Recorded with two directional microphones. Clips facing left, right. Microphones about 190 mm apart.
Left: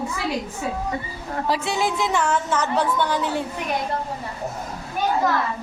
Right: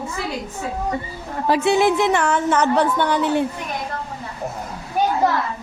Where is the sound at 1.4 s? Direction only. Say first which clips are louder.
Right 8 dB; 55° right (ahead or behind).